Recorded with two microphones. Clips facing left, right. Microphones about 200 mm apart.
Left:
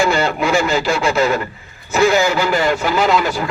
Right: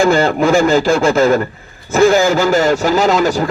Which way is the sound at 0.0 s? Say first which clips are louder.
Right 5 dB; 50° right (ahead or behind).